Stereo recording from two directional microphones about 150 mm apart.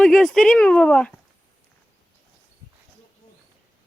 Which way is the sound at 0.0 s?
Centre (ahead or behind).